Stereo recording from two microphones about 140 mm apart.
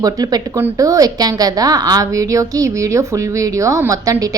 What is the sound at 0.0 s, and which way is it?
A woman's voice, 25° right (ahead or behind).